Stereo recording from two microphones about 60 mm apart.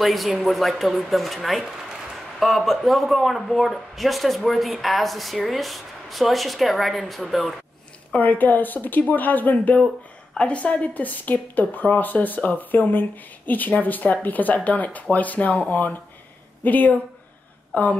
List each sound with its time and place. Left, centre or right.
0.0 s speech: centre
8.2 s a woman's voice: left